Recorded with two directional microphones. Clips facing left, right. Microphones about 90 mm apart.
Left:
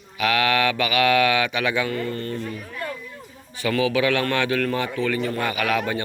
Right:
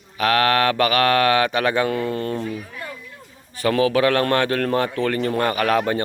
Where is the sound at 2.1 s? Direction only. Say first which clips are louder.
Right 4 dB; 60° right (ahead or behind).